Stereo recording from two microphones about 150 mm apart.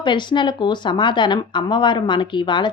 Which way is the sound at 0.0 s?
30° left (ahead or behind).